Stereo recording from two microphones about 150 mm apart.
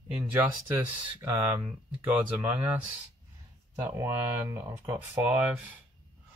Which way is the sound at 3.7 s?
20° right (ahead or behind).